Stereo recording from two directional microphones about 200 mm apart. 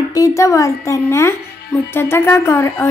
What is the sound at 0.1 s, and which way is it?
Speech, 15° left (ahead or behind).